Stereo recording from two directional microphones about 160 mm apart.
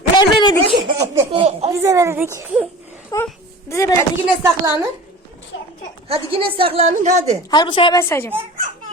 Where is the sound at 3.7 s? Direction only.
20° left (ahead or behind).